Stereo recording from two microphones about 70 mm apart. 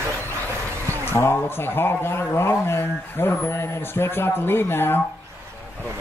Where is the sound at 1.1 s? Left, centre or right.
Left.